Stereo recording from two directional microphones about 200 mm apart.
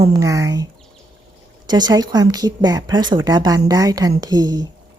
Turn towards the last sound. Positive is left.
turn(degrees=-20)  # may be behind; listen again after turning